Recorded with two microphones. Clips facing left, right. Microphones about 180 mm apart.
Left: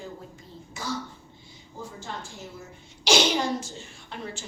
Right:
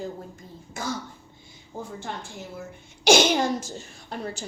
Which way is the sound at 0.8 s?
50° right (ahead or behind).